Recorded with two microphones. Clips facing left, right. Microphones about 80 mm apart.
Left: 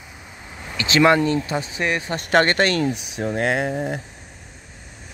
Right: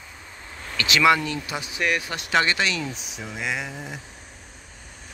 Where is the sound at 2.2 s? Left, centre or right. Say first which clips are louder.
Left 6 dB; left.